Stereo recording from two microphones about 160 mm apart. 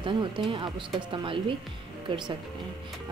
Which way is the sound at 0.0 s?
30° right (ahead or behind).